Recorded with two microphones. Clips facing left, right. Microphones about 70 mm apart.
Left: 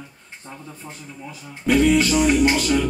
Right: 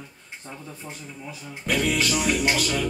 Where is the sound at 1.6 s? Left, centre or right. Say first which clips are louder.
Left 8 dB; centre.